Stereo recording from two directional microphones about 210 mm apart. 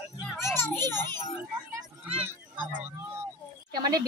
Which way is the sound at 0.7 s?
10° left (ahead or behind).